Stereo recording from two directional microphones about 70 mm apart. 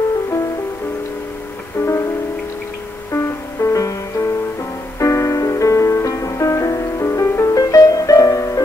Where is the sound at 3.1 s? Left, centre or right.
Left.